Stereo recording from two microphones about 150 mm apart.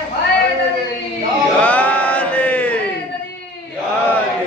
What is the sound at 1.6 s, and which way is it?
Chant, 10° left (ahead or behind).